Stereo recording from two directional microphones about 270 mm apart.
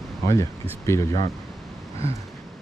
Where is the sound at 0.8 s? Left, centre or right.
Centre.